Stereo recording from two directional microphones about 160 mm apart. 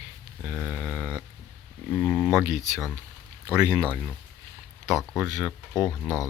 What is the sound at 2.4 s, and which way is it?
Speech, 20° right (ahead or behind).